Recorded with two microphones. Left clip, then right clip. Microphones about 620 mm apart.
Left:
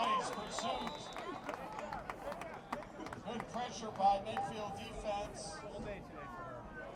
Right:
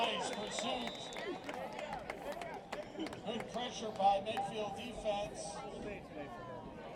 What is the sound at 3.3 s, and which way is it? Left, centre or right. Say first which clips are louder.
Speech: left 1 dB; left.